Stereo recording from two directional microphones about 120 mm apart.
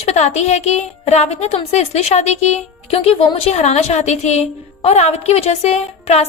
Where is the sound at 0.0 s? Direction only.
70° left (ahead or behind).